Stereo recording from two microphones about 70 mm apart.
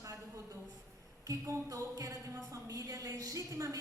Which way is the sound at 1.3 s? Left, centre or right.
Right.